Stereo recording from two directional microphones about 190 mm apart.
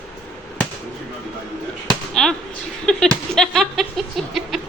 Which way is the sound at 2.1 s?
5° left (ahead or behind).